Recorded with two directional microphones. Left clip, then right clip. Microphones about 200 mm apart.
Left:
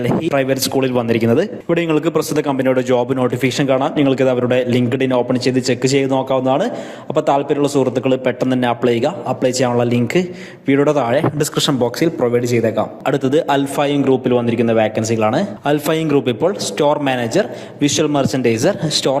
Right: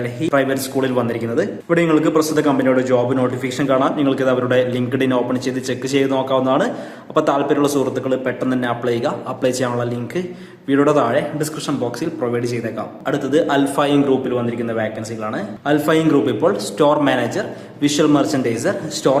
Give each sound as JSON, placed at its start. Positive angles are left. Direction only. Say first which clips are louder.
{"t": 0.3, "sound": "a man's voice", "louder": "right 2 dB", "side_deg": 35}